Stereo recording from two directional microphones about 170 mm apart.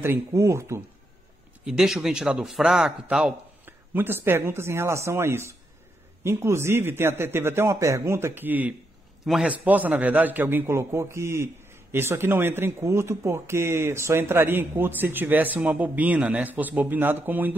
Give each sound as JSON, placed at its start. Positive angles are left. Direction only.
{"t": 0.0, "sound": "a man's voice", "side_deg": -15}
{"t": 1.6, "sound": "a man's voice", "side_deg": -5}